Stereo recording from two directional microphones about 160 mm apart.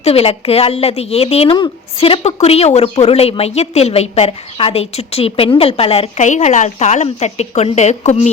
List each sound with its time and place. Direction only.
0.0 s speech: 40° left (ahead or behind)